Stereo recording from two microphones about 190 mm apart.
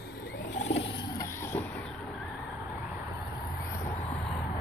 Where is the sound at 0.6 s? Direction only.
70° left (ahead or behind).